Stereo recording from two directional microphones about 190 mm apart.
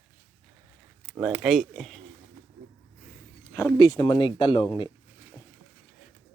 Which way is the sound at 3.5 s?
15° left (ahead or behind).